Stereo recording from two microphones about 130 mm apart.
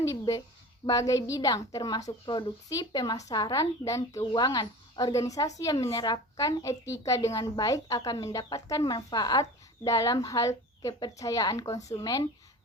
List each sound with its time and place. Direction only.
0.0 s a woman's voice: 25° left (ahead or behind)